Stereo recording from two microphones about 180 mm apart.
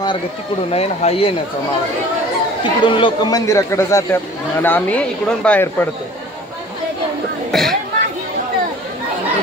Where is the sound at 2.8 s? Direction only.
25° left (ahead or behind); by 5.8 s 10° left (ahead or behind).